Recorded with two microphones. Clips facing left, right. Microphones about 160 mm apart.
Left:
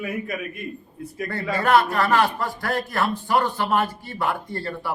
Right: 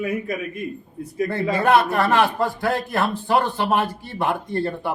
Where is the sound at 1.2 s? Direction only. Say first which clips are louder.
Right 3 dB; 20° right (ahead or behind).